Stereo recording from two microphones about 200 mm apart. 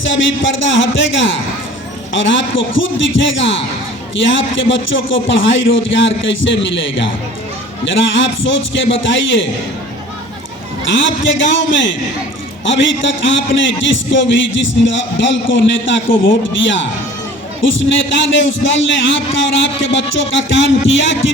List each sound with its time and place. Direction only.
0.0 s a man's voice: 70° left (ahead or behind)
10.9 s a man's voice: 70° left (ahead or behind)